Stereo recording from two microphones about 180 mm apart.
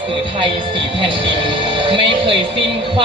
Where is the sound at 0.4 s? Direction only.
30° right (ahead or behind).